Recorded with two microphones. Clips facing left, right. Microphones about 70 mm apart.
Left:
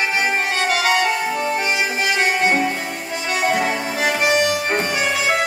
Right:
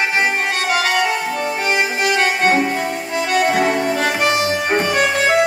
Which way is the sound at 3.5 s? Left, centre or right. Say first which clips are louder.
Right 3 dB; centre.